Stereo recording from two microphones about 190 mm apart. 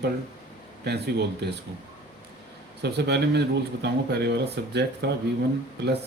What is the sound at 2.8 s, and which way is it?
Speech, 60° right (ahead or behind).